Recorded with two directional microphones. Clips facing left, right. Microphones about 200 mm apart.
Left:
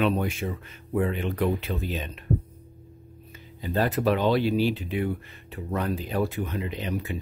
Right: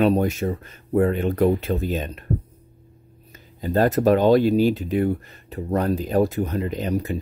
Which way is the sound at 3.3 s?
45° right (ahead or behind).